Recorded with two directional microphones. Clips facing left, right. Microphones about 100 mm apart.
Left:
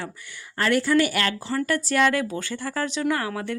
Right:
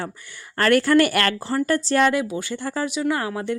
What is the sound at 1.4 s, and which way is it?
Speech, 35° right (ahead or behind).